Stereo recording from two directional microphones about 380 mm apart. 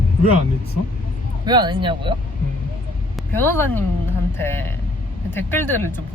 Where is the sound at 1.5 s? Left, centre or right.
Centre.